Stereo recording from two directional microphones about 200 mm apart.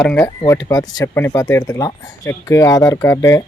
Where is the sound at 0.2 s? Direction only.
15° left (ahead or behind).